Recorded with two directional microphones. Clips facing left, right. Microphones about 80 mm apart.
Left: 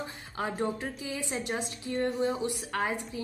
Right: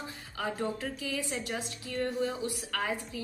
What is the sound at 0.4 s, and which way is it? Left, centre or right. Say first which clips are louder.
A woman's voice: left 2 dB; left.